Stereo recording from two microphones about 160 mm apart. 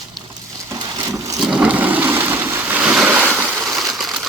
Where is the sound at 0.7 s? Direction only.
20° right (ahead or behind).